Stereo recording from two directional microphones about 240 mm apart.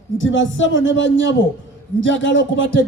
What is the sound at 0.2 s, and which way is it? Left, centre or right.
Speech, left.